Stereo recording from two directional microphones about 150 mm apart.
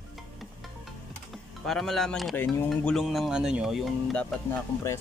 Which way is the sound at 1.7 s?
Centre (ahead or behind).